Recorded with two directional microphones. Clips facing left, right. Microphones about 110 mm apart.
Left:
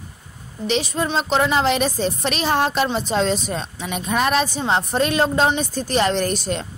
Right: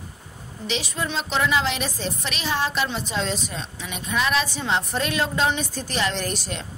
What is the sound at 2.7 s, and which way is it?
A woman's voice, 45° left (ahead or behind).